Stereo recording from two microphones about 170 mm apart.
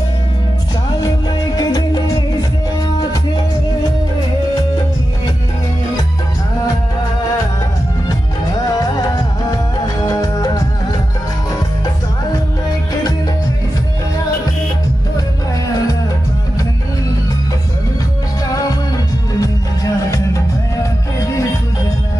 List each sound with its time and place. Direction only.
1.0 s music: 20° left (ahead or behind)
8.6 s music: 20° left (ahead or behind)
19.4 s music: 20° left (ahead or behind)